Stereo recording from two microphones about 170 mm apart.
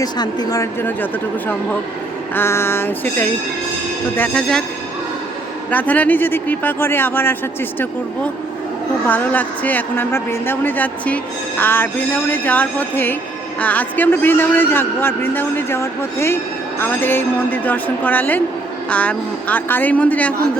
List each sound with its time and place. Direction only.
0.0 s a woman's voice: 25° left (ahead or behind)
2.3 s a man's voice: 15° left (ahead or behind)
5.7 s a man's voice: 10° left (ahead or behind)